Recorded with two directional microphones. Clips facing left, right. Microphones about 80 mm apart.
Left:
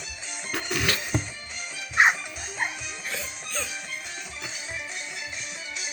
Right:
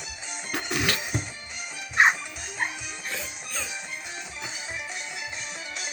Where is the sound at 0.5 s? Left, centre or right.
Centre.